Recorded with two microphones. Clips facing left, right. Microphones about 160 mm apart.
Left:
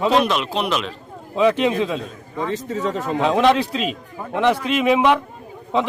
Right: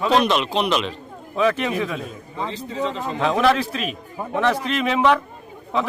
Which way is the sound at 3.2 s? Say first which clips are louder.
Left 2 dB; 15° left (ahead or behind).